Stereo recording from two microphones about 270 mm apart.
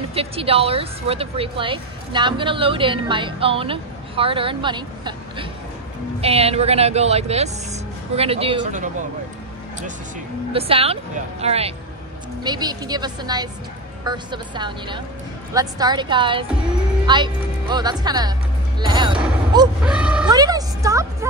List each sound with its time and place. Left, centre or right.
0.1 s speech: right
10.5 s speech: right
18.8 s music: centre
19.8 s speech: centre
20.2 s a woman's voice: centre